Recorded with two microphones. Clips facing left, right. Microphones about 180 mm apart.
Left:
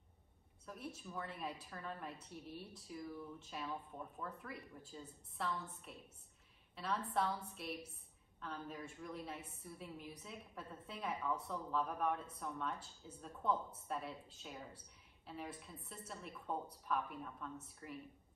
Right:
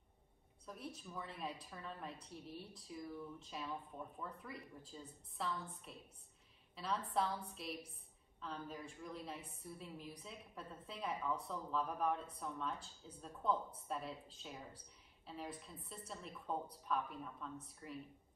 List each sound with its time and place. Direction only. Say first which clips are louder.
0.7 s speech: left 1 dB; centre (ahead or behind)
6.7 s a sound: even; centre (ahead or behind)
7.2 s speech: even; centre (ahead or behind)